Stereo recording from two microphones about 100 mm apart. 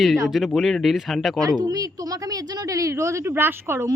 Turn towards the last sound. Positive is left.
turn(degrees=-25)  # may be behind; listen again after turning